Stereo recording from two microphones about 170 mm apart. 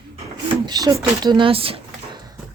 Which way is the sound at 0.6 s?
20° right (ahead or behind).